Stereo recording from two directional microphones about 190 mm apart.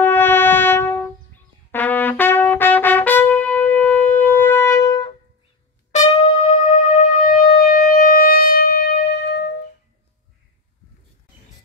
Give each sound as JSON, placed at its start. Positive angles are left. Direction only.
{"t": 0.0, "sound": "brass instrument", "side_deg": 10}
{"t": 1.7, "sound": "trumpet", "side_deg": 10}
{"t": 5.9, "sound": "music", "side_deg": 40}